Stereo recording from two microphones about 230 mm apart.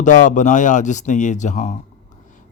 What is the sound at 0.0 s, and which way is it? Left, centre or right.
A man's voice, left.